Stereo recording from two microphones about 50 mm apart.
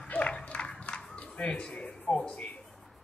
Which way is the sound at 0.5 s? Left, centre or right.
Left.